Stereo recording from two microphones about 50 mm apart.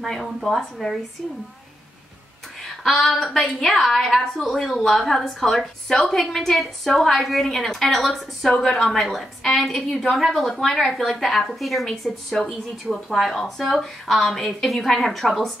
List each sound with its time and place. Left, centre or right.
0.0 s a woman's voice: centre
2.8 s a woman's voice: centre